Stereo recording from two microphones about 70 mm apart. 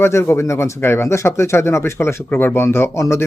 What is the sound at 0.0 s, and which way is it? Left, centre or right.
A man's voice, left.